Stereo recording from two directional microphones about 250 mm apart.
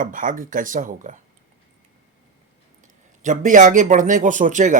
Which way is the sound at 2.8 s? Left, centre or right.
Right.